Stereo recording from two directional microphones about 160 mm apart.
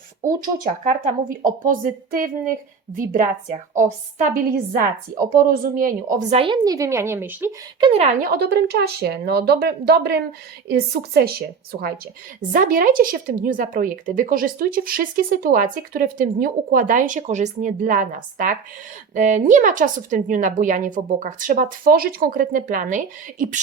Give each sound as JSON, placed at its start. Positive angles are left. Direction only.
{"t": 0.2, "sound": "a woman's voice", "side_deg": -60}
{"t": 4.8, "sound": "speech", "side_deg": -65}
{"t": 6.3, "sound": "a woman's voice", "side_deg": -30}
{"t": 7.8, "sound": "speech", "side_deg": -35}
{"t": 8.2, "sound": "a woman's voice", "side_deg": -80}
{"t": 12.5, "sound": "speech", "side_deg": -60}